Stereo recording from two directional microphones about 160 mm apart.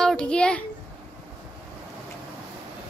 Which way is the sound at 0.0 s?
5° left (ahead or behind).